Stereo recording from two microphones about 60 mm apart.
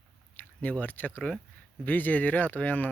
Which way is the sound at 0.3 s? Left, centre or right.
Left.